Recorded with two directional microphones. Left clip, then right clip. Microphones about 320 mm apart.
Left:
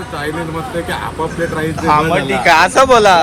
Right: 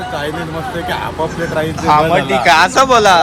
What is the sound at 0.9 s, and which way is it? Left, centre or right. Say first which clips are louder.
Speech: right 2 dB; centre.